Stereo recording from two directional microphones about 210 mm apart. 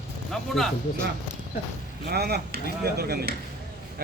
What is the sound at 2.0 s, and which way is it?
A man's voice, 50° right (ahead or behind).